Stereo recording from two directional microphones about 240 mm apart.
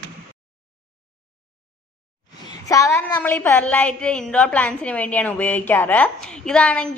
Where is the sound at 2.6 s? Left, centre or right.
Centre.